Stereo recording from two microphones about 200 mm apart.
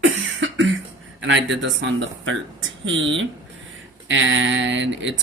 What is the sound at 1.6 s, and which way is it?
Speech, 65° right (ahead or behind).